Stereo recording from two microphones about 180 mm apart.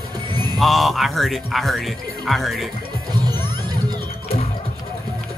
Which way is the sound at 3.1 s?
25° right (ahead or behind).